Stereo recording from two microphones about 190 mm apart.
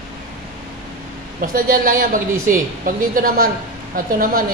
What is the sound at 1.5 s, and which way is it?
Speech, 45° right (ahead or behind).